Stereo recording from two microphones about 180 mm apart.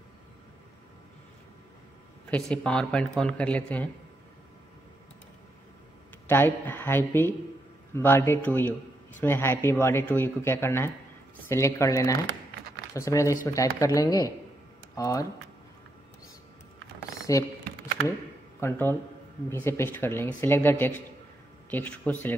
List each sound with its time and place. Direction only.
2.3 s speech: 5° left (ahead or behind)
6.2 s speech: 10° left (ahead or behind)
17.3 s speech: 20° left (ahead or behind)
18.6 s speech: 15° left (ahead or behind)